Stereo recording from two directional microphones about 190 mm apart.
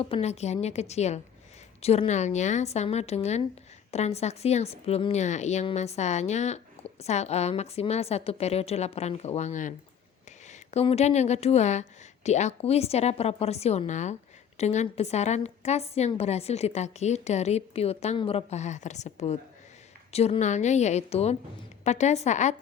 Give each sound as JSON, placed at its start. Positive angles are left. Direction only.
{"t": 0.0, "sound": "a woman's voice", "side_deg": 35}